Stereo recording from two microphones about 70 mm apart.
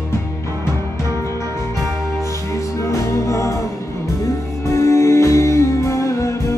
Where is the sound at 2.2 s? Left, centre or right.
Left.